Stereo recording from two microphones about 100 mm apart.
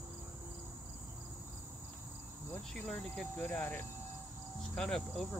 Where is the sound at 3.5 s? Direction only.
20° left (ahead or behind).